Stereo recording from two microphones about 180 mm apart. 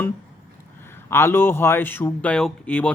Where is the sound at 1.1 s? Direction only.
10° left (ahead or behind).